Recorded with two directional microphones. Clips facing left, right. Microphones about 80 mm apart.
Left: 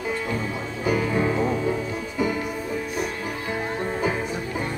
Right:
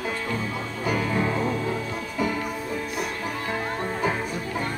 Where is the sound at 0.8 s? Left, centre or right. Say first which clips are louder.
Left 3 dB; centre.